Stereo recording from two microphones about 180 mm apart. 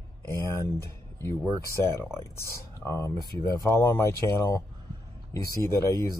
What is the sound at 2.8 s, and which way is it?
Speech, 15° left (ahead or behind).